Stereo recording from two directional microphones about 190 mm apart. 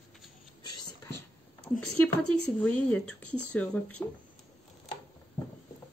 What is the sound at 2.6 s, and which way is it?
Speech, 5° left (ahead or behind).